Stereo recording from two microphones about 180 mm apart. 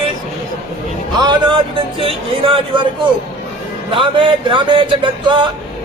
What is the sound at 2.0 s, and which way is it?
Speech, 30° right (ahead or behind).